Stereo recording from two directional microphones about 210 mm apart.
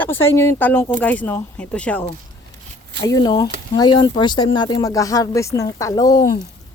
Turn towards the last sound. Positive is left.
turn(degrees=15)  # may be behind; listen again after turning